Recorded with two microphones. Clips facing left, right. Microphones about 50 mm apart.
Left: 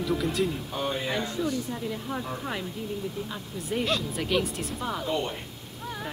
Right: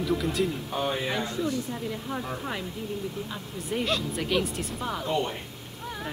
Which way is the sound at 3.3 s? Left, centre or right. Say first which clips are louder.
Even; centre.